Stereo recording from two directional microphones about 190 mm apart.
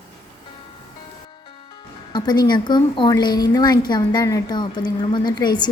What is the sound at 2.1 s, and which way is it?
A woman's voice, 20° left (ahead or behind).